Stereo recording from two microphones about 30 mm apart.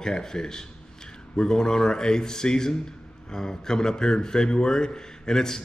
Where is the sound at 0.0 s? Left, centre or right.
Left.